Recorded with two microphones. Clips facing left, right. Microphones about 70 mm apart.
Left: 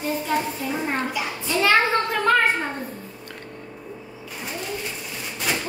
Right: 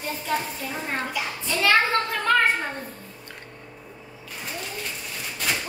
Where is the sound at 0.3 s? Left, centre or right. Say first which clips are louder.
Even; centre.